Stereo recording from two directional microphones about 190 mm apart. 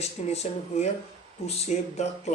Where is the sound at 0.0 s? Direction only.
35° left (ahead or behind).